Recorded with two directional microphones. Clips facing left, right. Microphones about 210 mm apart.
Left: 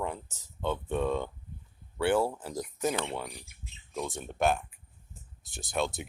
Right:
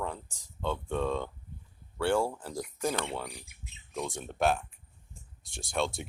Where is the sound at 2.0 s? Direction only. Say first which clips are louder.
Left 1 dB; 5° left (ahead or behind).